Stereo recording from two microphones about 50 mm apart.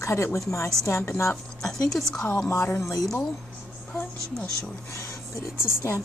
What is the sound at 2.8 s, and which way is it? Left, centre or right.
Speech, left.